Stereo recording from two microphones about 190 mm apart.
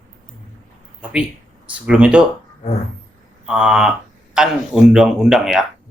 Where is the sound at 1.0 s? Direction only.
5° right (ahead or behind).